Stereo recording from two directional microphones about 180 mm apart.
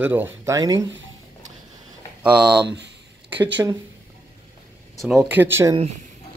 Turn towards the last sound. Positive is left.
turn(degrees=-15)  # may be behind; listen again after turning